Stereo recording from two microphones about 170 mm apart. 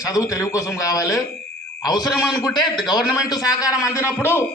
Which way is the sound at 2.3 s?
25° left (ahead or behind).